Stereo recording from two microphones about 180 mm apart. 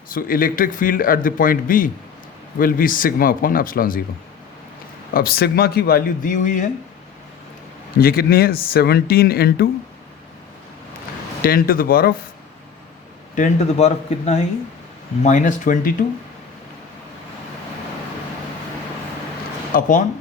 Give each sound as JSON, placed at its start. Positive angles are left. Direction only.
{"t": 0.1, "sound": "a man's voice", "side_deg": 50}
{"t": 5.1, "sound": "speech", "side_deg": 55}
{"t": 7.9, "sound": "speech", "side_deg": 60}
{"t": 11.4, "sound": "a man's voice", "side_deg": 55}
{"t": 13.3, "sound": "a man's voice", "side_deg": 40}
{"t": 19.7, "sound": "a man's voice", "side_deg": 50}